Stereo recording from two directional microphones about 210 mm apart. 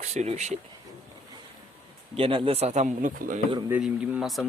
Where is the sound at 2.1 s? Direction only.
25° right (ahead or behind).